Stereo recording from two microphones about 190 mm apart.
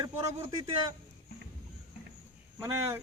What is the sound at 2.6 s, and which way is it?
Speech, 15° right (ahead or behind).